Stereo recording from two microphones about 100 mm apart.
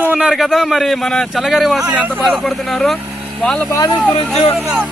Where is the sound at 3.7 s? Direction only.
35° left (ahead or behind).